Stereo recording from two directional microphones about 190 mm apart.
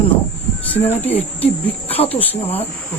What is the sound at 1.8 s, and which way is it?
Speech, 30° left (ahead or behind).